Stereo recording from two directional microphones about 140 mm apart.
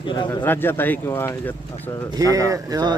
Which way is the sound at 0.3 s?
15° left (ahead or behind).